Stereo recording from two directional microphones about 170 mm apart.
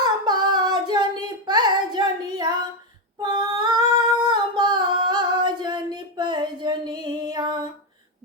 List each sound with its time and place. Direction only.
0.0 s singing: 25° right (ahead or behind)
3.2 s female singing: 25° right (ahead or behind)